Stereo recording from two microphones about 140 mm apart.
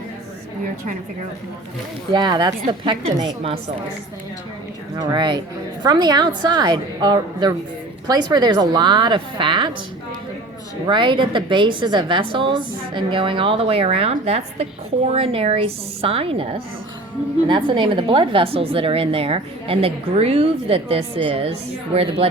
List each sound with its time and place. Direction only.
2.1 s a woman's voice: 30° right (ahead or behind)
4.9 s a woman's voice: 30° right (ahead or behind)
10.8 s a woman's voice: 35° right (ahead or behind)